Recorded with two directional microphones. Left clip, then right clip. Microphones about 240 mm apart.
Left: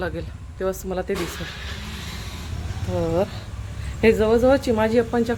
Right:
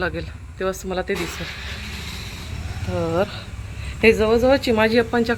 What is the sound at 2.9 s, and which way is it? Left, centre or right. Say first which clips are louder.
Speech: right 1 dB; centre.